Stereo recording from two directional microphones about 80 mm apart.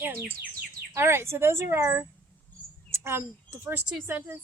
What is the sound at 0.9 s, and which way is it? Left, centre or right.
A woman's voice, right.